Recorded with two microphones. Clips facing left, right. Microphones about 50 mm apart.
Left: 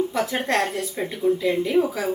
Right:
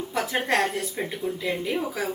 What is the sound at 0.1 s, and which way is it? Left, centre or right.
A woman's voice, centre.